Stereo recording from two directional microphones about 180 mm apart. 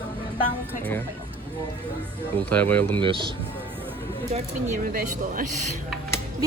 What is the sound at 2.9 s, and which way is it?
Speech, 25° right (ahead or behind).